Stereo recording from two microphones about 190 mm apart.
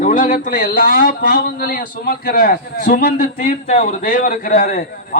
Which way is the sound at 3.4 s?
40° left (ahead or behind).